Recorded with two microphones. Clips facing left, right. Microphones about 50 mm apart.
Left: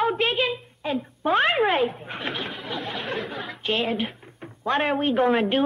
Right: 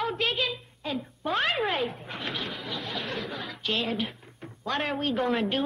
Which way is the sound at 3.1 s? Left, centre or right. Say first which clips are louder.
Left 4 dB; left.